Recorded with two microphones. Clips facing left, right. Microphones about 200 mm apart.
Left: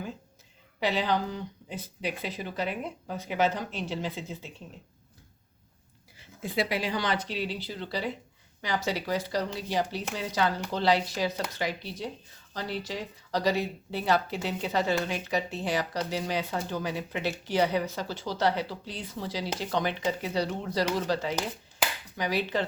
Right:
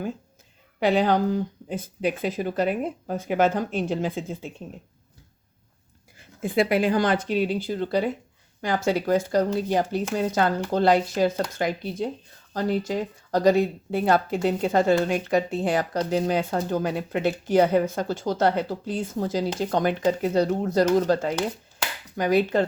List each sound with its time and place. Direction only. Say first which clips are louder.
0.8 s speech: right 7 dB; 50° right (ahead or behind)
6.1 s speech: right 7 dB; 50° right (ahead or behind)